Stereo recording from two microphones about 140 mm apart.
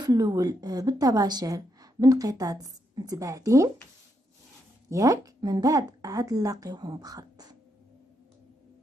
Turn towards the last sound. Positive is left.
turn(degrees=-25)  # may be behind; listen again after turning